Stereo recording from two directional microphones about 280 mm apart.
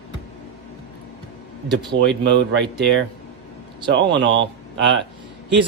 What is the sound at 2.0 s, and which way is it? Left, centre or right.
Speech, right.